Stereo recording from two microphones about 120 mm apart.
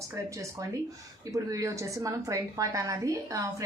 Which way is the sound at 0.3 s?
25° right (ahead or behind).